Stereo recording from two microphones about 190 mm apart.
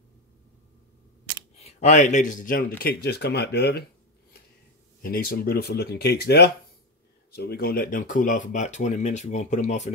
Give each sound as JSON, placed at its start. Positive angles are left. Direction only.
{"t": 1.6, "sound": "speech", "side_deg": 35}
{"t": 2.8, "sound": "speech", "side_deg": 55}
{"t": 5.0, "sound": "speech", "side_deg": 50}